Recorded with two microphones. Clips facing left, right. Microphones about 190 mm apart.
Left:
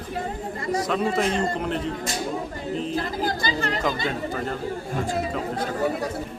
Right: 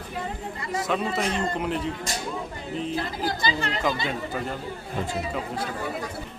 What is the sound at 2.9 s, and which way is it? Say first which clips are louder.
Chatter: left 2 dB; 45° left (ahead or behind).